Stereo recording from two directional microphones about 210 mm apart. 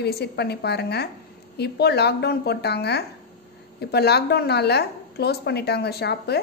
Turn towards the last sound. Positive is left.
turn(degrees=50)  # may be behind; listen again after turning